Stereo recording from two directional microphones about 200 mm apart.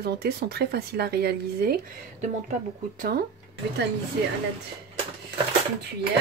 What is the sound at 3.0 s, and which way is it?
Speech, 50° right (ahead or behind).